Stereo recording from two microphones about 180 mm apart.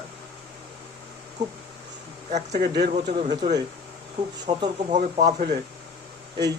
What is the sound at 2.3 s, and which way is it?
Speech, 40° right (ahead or behind).